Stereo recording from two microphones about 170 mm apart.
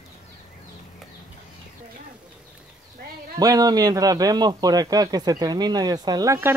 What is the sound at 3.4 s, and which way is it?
Speech, 20° right (ahead or behind).